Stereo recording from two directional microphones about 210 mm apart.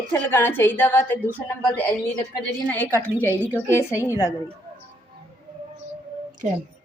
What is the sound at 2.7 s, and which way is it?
A woman's voice, 10° left (ahead or behind).